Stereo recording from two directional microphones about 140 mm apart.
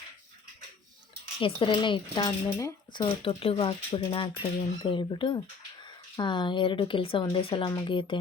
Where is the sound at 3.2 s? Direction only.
40° left (ahead or behind).